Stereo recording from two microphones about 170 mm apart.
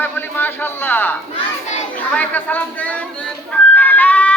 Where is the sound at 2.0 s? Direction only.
10° left (ahead or behind).